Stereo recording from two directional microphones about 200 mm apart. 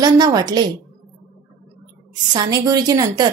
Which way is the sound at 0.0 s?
20° right (ahead or behind).